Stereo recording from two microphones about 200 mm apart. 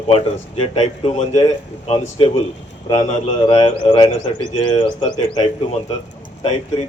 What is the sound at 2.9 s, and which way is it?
Speech, 30° left (ahead or behind).